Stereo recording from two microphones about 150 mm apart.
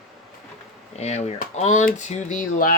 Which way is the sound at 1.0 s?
45° left (ahead or behind).